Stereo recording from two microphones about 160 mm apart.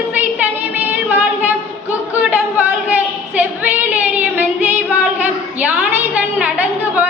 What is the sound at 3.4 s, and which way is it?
Female singing, 10° right (ahead or behind).